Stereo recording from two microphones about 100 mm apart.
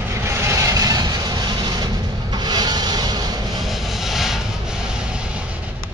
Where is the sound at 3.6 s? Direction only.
Centre (ahead or behind).